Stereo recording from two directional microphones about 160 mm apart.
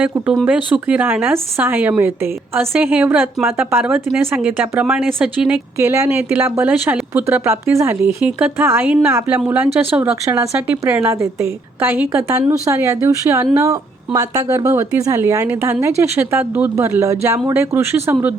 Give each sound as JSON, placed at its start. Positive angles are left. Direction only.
{"t": 0.0, "sound": "speech", "side_deg": -10}
{"t": 5.7, "sound": "speech", "side_deg": -20}